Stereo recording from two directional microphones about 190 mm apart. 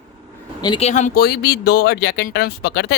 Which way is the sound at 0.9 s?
40° left (ahead or behind).